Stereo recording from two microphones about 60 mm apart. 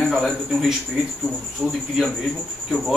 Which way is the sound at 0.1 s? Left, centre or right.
Centre.